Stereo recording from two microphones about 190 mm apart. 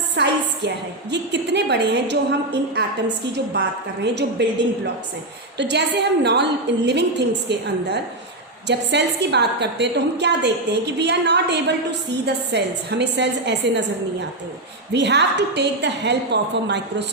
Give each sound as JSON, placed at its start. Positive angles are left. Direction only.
{"t": 0.2, "sound": "a woman's voice", "side_deg": -65}
{"t": 14.9, "sound": "a woman's voice", "side_deg": -65}